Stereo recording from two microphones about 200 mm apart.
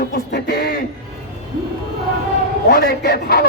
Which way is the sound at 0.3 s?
55° left (ahead or behind).